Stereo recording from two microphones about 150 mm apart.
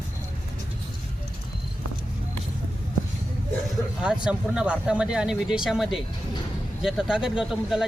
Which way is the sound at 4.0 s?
5° right (ahead or behind).